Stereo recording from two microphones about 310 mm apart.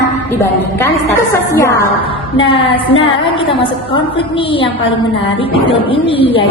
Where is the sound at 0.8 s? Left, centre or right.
Centre.